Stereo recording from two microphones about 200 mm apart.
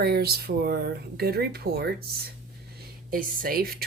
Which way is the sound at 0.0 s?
50° right (ahead or behind).